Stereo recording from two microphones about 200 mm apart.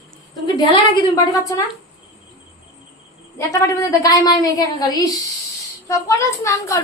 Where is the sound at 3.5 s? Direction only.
15° left (ahead or behind).